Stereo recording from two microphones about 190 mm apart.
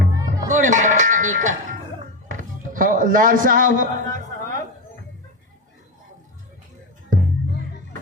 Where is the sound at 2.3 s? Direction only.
45° right (ahead or behind).